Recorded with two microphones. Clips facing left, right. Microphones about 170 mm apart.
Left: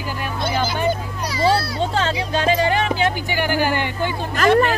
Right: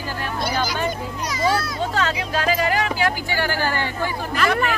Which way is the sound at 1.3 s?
30° left (ahead or behind).